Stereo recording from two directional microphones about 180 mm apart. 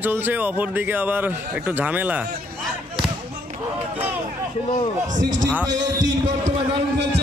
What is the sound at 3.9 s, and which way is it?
Speech, 10° right (ahead or behind).